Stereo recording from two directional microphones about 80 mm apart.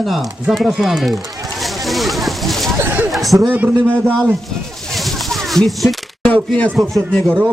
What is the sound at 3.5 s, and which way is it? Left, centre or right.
Speech, right.